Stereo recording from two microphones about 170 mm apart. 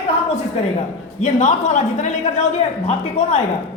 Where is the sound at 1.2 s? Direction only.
45° left (ahead or behind).